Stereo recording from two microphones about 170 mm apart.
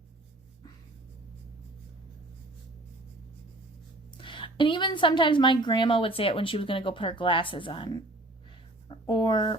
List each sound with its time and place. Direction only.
4.2 s a woman's voice: 30° left (ahead or behind)